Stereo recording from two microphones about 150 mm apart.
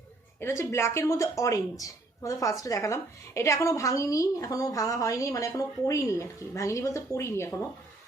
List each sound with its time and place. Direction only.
0.3 s a woman's voice: 20° left (ahead or behind)